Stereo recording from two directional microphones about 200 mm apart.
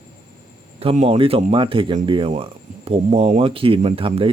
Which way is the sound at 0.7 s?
30° right (ahead or behind).